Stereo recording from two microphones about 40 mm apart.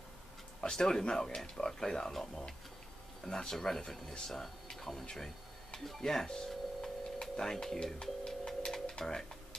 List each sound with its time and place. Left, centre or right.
0.6 s speech: centre
5.9 s tick-tock: centre
7.5 s speech: centre
8.3 s music: centre